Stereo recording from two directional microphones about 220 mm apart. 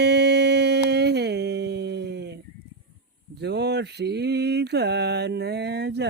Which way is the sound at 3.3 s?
50° right (ahead or behind).